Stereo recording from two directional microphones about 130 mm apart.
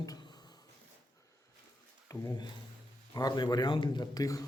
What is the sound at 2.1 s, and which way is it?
A man's voice, 30° left (ahead or behind).